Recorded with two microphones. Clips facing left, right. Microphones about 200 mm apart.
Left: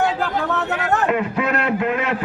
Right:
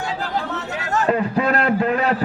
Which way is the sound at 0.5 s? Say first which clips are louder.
Left 3 dB; 60° left (ahead or behind).